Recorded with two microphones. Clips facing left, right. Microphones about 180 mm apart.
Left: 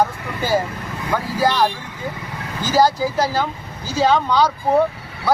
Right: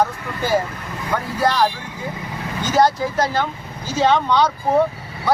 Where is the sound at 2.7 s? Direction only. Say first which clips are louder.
Left 1 dB; 5° left (ahead or behind).